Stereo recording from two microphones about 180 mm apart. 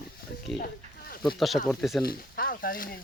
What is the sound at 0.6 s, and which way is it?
Snake, 55° left (ahead or behind).